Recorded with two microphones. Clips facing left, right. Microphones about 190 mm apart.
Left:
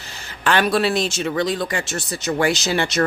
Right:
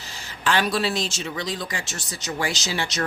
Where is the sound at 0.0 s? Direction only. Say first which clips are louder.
Left 3 dB; 60° left (ahead or behind).